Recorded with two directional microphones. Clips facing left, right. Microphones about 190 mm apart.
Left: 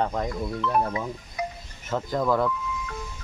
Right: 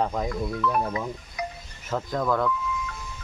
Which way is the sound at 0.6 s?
25° left (ahead or behind).